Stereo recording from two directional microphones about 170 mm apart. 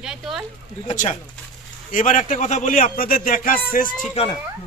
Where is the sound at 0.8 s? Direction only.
45° left (ahead or behind).